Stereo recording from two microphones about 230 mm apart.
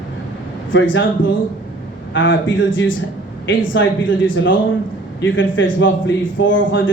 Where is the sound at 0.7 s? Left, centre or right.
Left.